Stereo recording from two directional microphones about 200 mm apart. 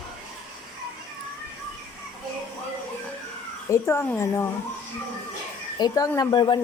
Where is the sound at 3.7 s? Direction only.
15° left (ahead or behind).